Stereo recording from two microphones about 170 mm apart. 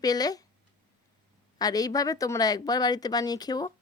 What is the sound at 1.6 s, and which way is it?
Speech, 20° left (ahead or behind).